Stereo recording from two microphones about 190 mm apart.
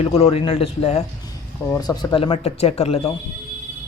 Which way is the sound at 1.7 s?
20° left (ahead or behind).